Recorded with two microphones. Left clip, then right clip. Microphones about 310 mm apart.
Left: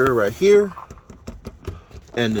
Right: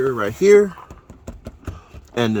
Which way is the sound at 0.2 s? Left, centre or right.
Centre.